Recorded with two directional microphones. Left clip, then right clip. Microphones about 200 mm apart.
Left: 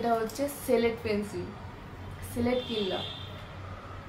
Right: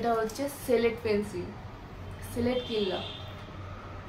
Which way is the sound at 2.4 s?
5° right (ahead or behind).